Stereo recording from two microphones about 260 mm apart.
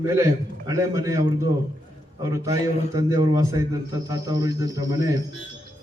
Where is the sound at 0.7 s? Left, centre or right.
Centre.